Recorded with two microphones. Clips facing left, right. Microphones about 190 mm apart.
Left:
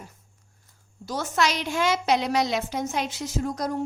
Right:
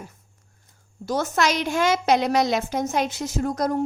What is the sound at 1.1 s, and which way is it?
A woman's voice, 50° right (ahead or behind).